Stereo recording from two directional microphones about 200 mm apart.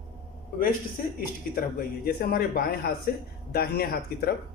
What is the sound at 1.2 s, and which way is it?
Speech, 45° left (ahead or behind).